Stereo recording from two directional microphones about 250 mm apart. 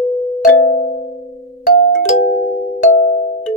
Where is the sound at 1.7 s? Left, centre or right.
Left.